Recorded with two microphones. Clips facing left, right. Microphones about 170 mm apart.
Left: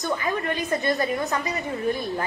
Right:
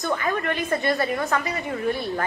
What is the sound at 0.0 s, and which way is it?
A woman's voice, 20° left (ahead or behind).